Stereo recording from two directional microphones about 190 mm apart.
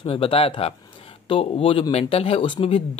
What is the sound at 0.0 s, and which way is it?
Speech, 30° left (ahead or behind).